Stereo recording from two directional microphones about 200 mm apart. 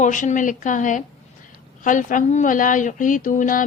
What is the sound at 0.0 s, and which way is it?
A woman's voice, 40° left (ahead or behind).